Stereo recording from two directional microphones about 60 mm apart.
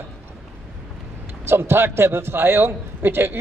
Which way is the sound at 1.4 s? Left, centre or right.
Right.